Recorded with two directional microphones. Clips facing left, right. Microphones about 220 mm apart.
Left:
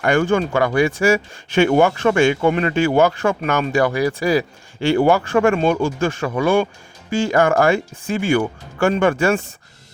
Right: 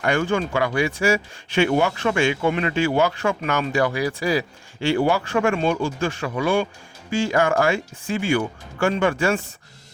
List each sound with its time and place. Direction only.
0.0 s speech: 45° left (ahead or behind)